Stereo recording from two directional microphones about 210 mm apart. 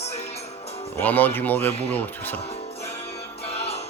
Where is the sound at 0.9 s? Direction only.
10° left (ahead or behind).